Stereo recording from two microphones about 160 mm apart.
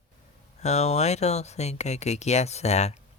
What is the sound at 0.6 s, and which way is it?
Speech, 45° left (ahead or behind).